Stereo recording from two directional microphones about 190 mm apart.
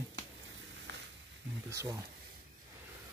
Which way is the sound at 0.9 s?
70° right (ahead or behind).